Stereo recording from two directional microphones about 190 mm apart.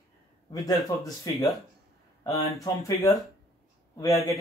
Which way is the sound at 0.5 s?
20° left (ahead or behind).